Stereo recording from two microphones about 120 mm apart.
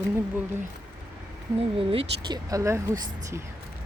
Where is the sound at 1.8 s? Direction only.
50° right (ahead or behind).